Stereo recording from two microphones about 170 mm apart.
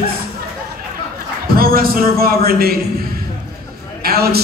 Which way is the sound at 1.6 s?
60° right (ahead or behind).